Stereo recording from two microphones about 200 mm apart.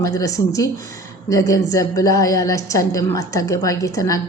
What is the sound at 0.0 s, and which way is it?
A woman's voice, 15° left (ahead or behind).